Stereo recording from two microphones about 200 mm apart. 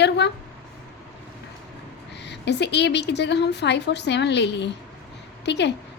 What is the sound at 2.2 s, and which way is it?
A woman's voice, 60° left (ahead or behind).